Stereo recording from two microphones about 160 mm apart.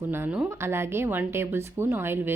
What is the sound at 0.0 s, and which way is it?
A woman's voice, 15° right (ahead or behind).